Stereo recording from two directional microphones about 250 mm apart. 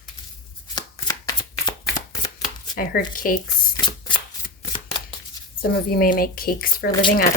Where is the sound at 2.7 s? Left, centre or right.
Left.